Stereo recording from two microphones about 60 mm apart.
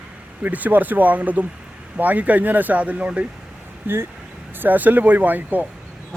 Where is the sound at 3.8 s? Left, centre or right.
Right.